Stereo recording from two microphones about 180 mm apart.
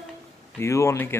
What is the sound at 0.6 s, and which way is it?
Speech, 15° left (ahead or behind).